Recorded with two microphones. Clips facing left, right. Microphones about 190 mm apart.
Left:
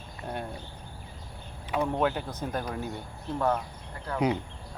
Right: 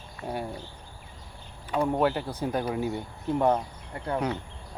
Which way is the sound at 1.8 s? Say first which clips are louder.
Right 3 dB; 10° right (ahead or behind).